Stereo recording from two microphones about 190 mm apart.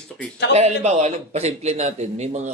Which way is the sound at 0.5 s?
35° right (ahead or behind).